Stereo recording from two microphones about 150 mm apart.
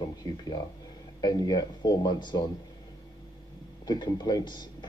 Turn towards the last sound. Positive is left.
turn(degrees=25)  # may be behind; listen again after turning